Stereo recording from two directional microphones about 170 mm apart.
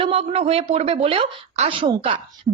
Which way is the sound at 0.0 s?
35° right (ahead or behind).